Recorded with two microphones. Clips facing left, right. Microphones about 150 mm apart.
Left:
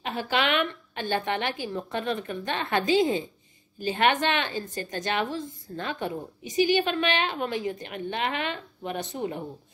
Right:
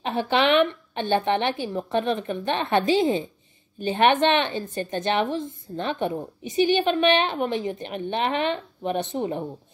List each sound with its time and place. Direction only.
0.0 s a woman's voice: 20° right (ahead or behind)